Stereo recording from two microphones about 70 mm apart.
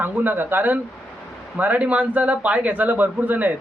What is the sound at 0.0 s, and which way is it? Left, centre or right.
Speech, right.